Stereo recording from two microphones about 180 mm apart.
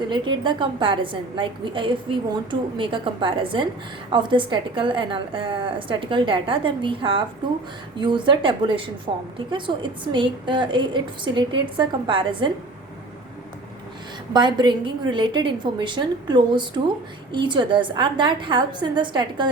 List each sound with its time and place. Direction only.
0.1 s a woman's voice: 25° right (ahead or behind)
14.3 s a woman's voice: 25° right (ahead or behind)